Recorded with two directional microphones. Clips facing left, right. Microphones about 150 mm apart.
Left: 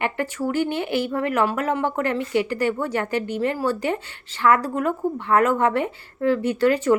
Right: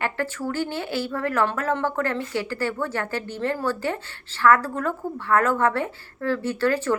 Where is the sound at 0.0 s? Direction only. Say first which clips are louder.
Left 2 dB; 15° left (ahead or behind).